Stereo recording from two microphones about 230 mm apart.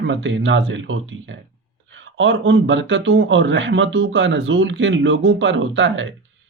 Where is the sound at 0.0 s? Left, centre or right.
Right.